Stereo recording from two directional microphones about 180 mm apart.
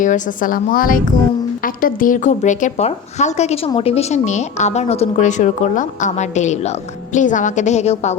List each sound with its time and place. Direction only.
0.0 s a woman's voice: 45° left (ahead or behind)